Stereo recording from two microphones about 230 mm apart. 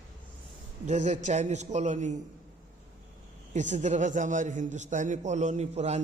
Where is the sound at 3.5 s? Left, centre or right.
Right.